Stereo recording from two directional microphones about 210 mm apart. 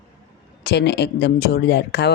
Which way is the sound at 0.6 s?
55° left (ahead or behind).